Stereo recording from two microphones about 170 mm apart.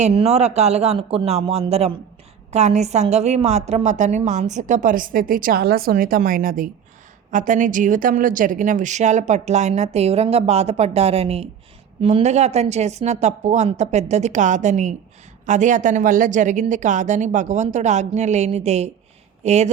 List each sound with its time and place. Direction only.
0.0 s a woman's voice: 40° right (ahead or behind)